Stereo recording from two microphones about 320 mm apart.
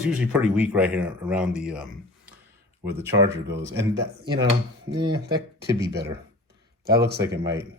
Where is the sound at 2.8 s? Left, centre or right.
Centre.